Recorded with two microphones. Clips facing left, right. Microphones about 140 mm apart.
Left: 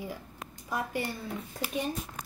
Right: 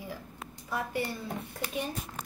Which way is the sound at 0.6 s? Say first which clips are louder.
Even; 15° left (ahead or behind).